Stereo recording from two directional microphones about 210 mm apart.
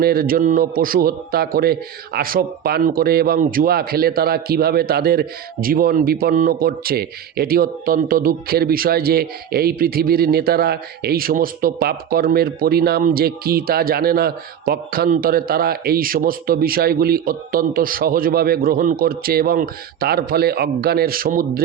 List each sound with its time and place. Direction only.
0.0 s a man's voice: 45° right (ahead or behind)